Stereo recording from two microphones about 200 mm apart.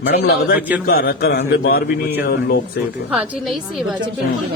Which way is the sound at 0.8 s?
50° left (ahead or behind).